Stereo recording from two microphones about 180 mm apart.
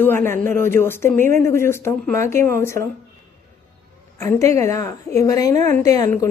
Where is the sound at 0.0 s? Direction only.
15° left (ahead or behind).